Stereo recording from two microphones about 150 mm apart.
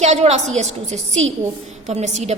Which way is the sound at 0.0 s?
50° right (ahead or behind).